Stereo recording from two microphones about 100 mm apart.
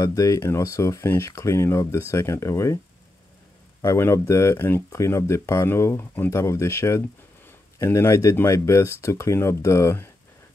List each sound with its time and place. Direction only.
0.0 s speech: 35° left (ahead or behind)
3.8 s speech: 30° left (ahead or behind)